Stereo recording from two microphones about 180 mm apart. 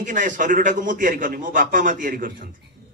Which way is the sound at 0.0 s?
45° right (ahead or behind).